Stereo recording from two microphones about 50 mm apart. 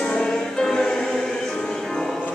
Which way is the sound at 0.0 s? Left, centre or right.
Centre.